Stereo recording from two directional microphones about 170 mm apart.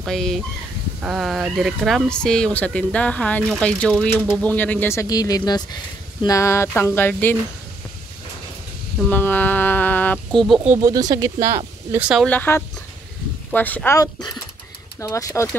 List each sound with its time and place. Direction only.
0.0 s speech: centre (ahead or behind)
9.1 s speech: 10° left (ahead or behind)
10.8 s speech: 20° right (ahead or behind)
12.3 s speech: 10° left (ahead or behind)